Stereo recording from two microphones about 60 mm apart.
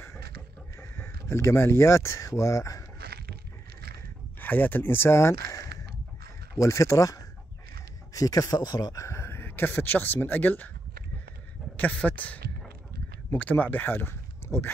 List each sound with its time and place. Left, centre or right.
0.7 s speech: left
4.4 s speech: left
8.1 s speech: left
11.7 s speech: left